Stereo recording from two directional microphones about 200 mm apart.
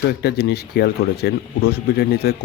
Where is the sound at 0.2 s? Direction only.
55° left (ahead or behind).